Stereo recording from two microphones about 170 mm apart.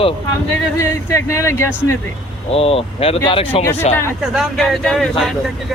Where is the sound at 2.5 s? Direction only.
35° left (ahead or behind).